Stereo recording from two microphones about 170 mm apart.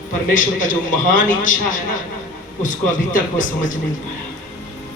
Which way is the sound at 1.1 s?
50° left (ahead or behind).